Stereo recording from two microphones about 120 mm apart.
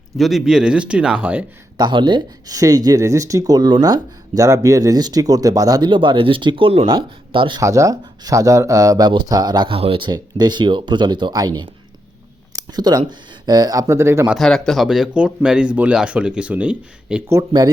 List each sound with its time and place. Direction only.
0.2 s speech: centre (ahead or behind)
1.8 s speech: 40° right (ahead or behind)
7.6 s speech: 25° right (ahead or behind); by 10.1 s 50° right (ahead or behind)
10.1 s speech: 35° right (ahead or behind)
12.6 s speech: 35° right (ahead or behind)
14.3 s speech: centre (ahead or behind)